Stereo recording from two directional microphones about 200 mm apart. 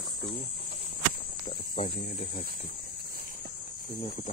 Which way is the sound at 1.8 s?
40° left (ahead or behind).